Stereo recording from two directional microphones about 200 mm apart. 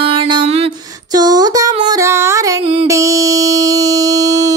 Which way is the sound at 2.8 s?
15° right (ahead or behind).